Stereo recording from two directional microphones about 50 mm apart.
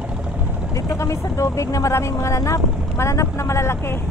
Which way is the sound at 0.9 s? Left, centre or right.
Left.